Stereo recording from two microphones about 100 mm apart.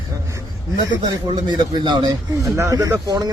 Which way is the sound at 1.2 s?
50° right (ahead or behind).